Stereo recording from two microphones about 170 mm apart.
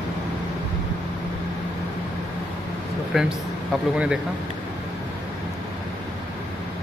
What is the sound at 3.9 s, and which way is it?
Speech, 5° right (ahead or behind).